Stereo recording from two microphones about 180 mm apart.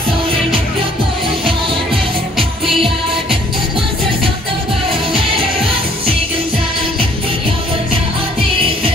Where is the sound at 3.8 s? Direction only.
30° right (ahead or behind).